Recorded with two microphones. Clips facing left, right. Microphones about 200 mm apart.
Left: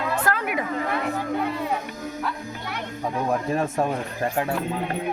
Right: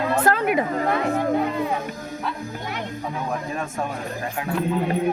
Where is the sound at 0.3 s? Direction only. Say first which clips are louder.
Right 7 dB; 25° right (ahead or behind).